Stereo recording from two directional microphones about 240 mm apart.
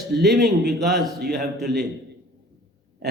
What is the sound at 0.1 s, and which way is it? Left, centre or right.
Speech, right.